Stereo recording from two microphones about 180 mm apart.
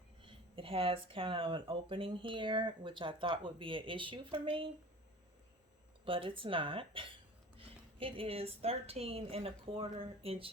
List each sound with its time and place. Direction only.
0.2 s speech: 30° right (ahead or behind)
6.1 s a woman's voice: 30° right (ahead or behind)